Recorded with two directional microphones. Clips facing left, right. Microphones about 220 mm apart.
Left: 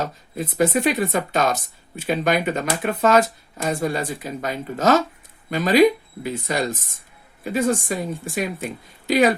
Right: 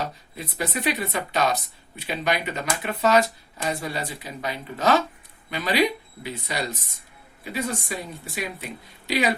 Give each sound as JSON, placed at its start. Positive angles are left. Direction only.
{"t": 0.0, "sound": "speech", "side_deg": 45}